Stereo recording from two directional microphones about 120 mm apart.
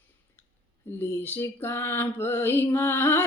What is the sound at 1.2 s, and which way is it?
Music, 20° left (ahead or behind).